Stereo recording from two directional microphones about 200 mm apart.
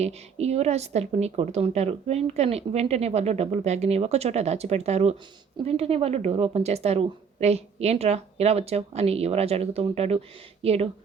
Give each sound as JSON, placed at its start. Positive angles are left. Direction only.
{"t": 0.0, "sound": "a woman's voice", "side_deg": -30}